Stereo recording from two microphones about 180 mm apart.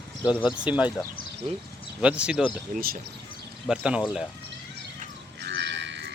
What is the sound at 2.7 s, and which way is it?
Speech, 55° right (ahead or behind).